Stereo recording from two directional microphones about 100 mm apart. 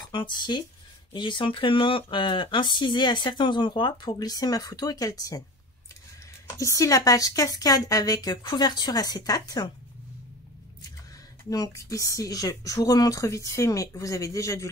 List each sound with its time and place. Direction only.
0.1 s speech: 50° left (ahead or behind)
6.6 s speech: 30° left (ahead or behind)
11.5 s speech: 35° left (ahead or behind)